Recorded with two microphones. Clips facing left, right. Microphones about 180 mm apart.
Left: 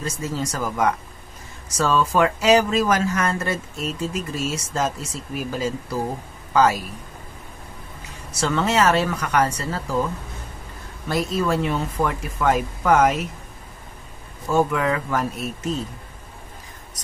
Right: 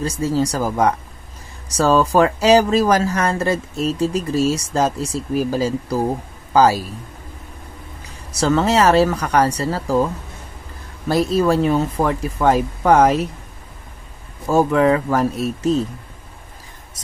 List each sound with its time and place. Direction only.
0.0 s speech: 35° right (ahead or behind)
8.4 s speech: 35° right (ahead or behind)
11.1 s speech: 35° right (ahead or behind)
14.5 s speech: 35° right (ahead or behind)